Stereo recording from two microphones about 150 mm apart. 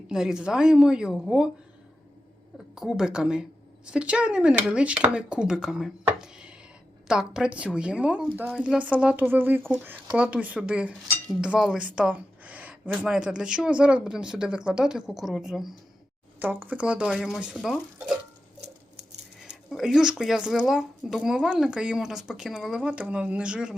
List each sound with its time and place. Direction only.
0.1 s speech: 5° right (ahead or behind)
2.7 s a woman's voice: 5° right (ahead or behind)
19.4 s speech: 5° right (ahead or behind)